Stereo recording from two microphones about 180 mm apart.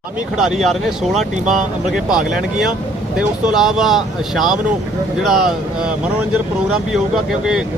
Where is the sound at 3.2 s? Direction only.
Centre (ahead or behind).